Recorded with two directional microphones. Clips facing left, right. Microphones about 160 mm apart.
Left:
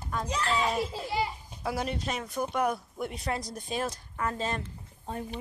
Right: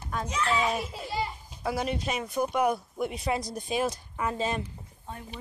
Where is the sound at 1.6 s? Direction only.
Centre (ahead or behind).